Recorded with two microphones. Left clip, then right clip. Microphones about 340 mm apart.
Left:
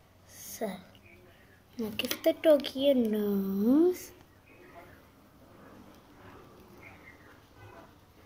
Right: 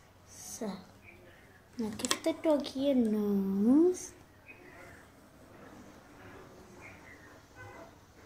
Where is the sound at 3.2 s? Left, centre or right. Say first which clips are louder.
Left 1 dB; left.